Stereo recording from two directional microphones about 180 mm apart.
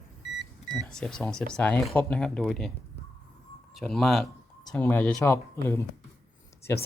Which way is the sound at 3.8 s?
Centre (ahead or behind).